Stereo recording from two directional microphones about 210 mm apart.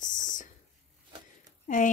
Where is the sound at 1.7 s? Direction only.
35° left (ahead or behind).